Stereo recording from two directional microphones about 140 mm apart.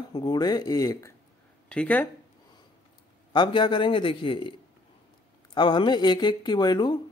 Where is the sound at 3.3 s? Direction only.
35° left (ahead or behind).